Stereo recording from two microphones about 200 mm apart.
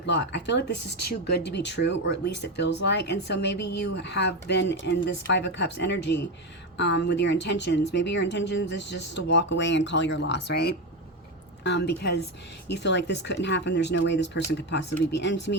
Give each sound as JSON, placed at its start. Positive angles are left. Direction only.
{"t": 0.0, "sound": "speech", "side_deg": 60}